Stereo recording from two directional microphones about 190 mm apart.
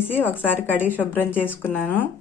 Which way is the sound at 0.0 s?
10° left (ahead or behind).